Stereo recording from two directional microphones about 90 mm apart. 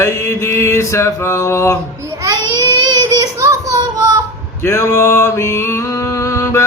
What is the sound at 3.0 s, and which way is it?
Child singing, 35° right (ahead or behind).